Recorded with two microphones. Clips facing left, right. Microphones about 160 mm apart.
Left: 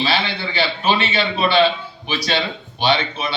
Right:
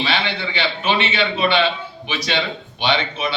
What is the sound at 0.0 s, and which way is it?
Mantra, 35° left (ahead or behind).